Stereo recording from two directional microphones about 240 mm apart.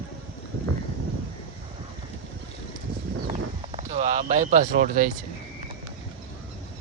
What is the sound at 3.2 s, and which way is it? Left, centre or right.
Clip-clop, right.